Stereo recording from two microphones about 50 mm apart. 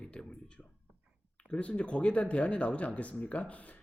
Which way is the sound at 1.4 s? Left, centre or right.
Centre.